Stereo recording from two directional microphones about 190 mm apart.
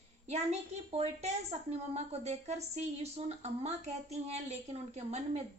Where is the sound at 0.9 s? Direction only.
35° right (ahead or behind).